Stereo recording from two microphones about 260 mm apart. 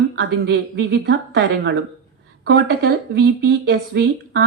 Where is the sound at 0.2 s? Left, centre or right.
Right.